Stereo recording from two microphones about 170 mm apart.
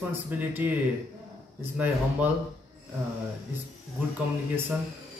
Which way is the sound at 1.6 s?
10° right (ahead or behind).